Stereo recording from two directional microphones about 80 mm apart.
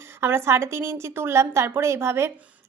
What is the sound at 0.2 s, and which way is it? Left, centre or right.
A woman's voice, right.